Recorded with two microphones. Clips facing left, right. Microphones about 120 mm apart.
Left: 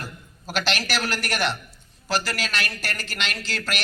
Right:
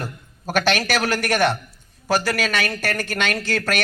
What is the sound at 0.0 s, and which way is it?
A man's voice, 55° right (ahead or behind).